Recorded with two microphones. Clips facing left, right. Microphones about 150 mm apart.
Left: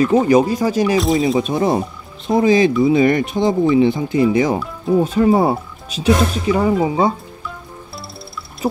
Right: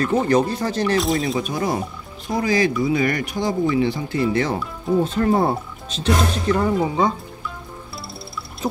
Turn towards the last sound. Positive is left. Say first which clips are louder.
# left 4 dB
turn(degrees=5)  # may be behind; listen again after turning